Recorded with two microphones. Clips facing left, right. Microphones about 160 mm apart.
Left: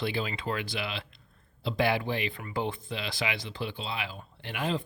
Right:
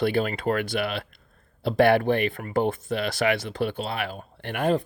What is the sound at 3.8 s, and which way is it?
Speech, 60° right (ahead or behind).